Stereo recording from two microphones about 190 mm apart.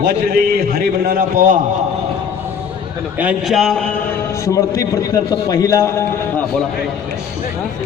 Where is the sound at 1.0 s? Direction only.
50° right (ahead or behind).